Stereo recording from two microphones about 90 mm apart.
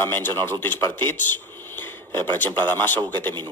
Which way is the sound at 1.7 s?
25° left (ahead or behind).